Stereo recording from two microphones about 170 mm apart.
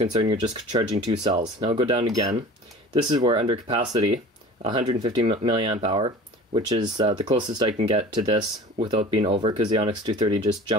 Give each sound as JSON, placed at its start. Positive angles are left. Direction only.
{"t": 0.0, "sound": "speech", "side_deg": -30}
{"t": 2.0, "sound": "speech", "side_deg": -20}